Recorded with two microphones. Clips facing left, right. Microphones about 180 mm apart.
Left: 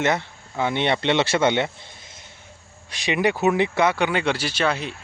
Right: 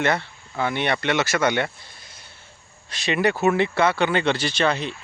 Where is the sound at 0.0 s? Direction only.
15° left (ahead or behind).